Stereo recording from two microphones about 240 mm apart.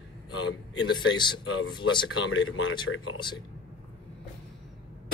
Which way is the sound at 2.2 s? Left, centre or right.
Left.